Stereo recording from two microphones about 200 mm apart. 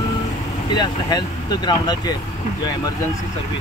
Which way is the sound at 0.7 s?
20° left (ahead or behind).